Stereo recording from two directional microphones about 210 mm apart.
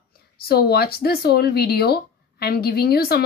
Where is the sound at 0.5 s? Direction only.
50° left (ahead or behind).